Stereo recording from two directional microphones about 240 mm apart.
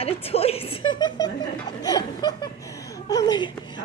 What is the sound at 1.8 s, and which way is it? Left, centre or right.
Speech, centre.